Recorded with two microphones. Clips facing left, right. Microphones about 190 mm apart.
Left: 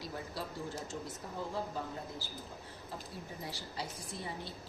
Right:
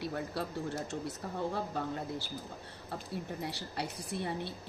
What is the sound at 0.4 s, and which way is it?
Speech, 60° right (ahead or behind).